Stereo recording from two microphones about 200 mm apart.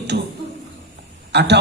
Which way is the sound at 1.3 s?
55° right (ahead or behind).